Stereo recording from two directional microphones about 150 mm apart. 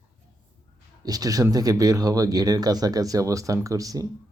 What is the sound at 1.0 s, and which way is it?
Speech, 25° right (ahead or behind).